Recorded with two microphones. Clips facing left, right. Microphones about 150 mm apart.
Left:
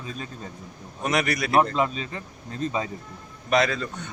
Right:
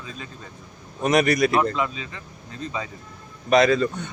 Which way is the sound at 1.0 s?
25° right (ahead or behind).